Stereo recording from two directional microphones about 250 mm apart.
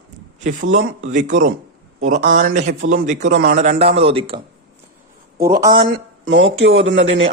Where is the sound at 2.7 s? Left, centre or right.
Right.